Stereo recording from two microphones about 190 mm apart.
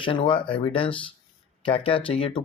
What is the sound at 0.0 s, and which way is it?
Speech, 25° left (ahead or behind).